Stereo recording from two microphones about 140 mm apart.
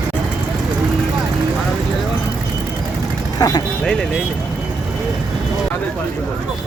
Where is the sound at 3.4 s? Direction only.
25° left (ahead or behind).